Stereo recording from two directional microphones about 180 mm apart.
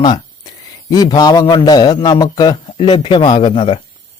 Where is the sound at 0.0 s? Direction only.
25° left (ahead or behind).